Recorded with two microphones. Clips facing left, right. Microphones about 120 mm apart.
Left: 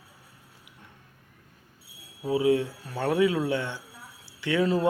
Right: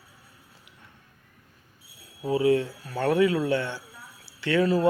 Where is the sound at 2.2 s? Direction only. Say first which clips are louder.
Right 1 dB; 10° left (ahead or behind).